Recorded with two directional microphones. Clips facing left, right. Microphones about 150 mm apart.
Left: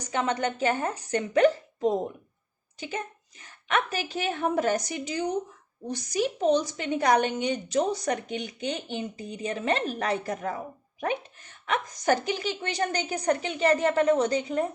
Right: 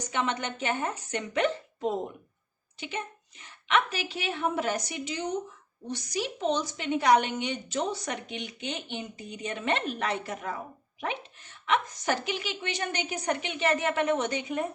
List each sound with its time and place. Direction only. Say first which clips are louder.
0.1 s a woman's voice: left 4 dB; 40° left (ahead or behind)
2.7 s a woman's voice: left 2 dB; 40° left (ahead or behind)
11.6 s a woman's voice: left 1 dB; 45° left (ahead or behind)